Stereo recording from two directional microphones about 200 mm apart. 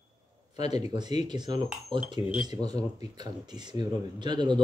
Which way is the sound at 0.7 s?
20° right (ahead or behind).